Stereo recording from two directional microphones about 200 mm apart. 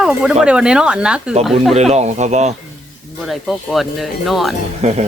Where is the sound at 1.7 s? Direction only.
35° right (ahead or behind).